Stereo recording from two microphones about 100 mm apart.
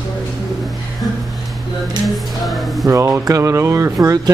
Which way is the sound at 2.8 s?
30° right (ahead or behind).